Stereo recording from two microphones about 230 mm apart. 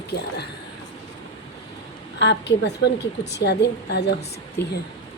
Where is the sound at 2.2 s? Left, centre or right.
Left.